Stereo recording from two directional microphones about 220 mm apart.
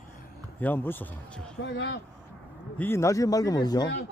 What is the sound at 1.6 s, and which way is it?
Speech, 55° left (ahead or behind).